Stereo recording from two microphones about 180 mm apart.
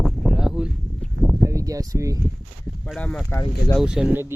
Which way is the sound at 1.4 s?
15° right (ahead or behind).